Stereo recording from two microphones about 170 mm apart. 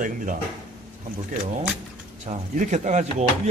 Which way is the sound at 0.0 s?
50° right (ahead or behind).